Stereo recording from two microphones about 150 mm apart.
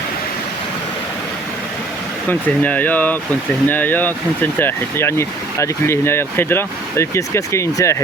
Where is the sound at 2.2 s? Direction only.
10° left (ahead or behind).